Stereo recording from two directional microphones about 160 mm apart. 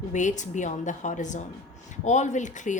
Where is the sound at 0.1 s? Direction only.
50° left (ahead or behind).